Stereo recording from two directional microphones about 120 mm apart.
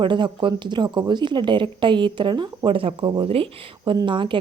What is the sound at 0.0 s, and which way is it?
Speech, 40° right (ahead or behind).